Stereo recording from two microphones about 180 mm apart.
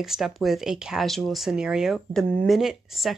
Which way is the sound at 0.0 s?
Centre (ahead or behind).